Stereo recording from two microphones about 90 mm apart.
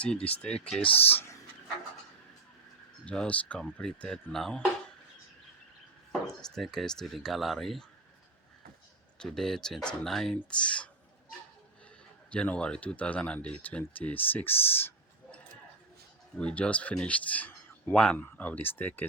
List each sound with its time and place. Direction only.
0.0 s speech: 10° left (ahead or behind)
3.1 s speech: 15° left (ahead or behind)
6.1 s speech: 5° left (ahead or behind)
9.1 s speech: 5° left (ahead or behind)
12.3 s speech: 15° left (ahead or behind)
16.4 s speech: 15° left (ahead or behind)